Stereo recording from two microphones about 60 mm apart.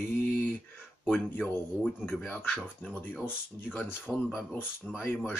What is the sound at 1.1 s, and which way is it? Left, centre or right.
Speech, left.